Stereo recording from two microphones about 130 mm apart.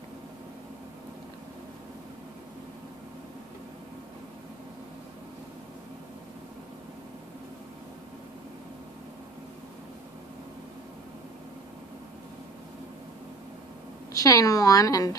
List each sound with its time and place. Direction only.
14.1 s a woman's voice: 25° left (ahead or behind)